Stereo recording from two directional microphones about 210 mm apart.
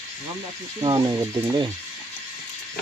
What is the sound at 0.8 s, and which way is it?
Speech, 20° right (ahead or behind).